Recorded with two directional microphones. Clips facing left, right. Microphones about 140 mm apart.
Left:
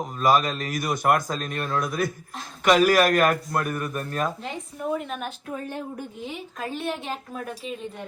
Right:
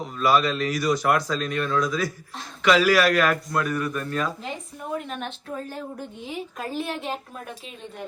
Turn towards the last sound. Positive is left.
turn(degrees=0)  # may be behind; listen again after turning